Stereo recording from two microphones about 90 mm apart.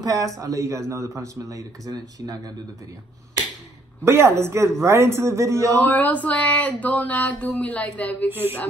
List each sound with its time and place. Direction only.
0.0 s speech: 40° right (ahead or behind)
4.0 s a woman's voice: 30° right (ahead or behind)
5.9 s speech: 20° left (ahead or behind)
8.3 s a woman's voice: 25° right (ahead or behind)